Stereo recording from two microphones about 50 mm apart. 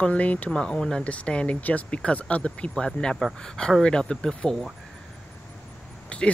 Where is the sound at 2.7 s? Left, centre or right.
Centre.